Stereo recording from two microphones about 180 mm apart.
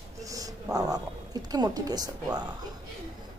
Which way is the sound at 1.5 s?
20° right (ahead or behind).